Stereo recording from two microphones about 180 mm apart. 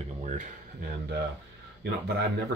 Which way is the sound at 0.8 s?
65° right (ahead or behind).